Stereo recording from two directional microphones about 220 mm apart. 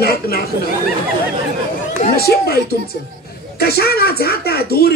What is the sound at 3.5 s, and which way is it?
Speech, 45° left (ahead or behind).